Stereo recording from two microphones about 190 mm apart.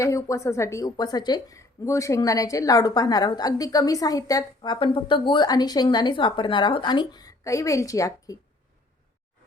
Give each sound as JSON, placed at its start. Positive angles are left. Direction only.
{"t": 0.0, "sound": "a woman's voice", "side_deg": 15}